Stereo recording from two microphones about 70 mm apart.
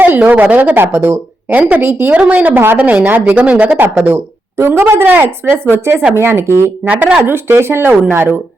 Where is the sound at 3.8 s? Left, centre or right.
Right.